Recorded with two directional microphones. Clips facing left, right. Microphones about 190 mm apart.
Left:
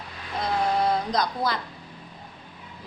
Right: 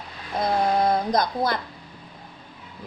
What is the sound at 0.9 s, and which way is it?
Speech, 50° right (ahead or behind).